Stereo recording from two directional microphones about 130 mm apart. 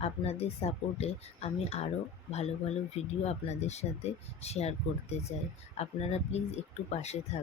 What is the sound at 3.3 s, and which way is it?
Speech, 55° left (ahead or behind).